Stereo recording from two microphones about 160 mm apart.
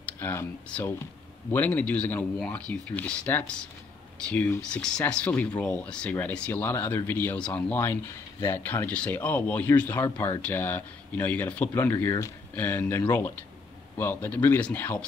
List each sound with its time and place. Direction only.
0.2 s speech: 15° left (ahead or behind)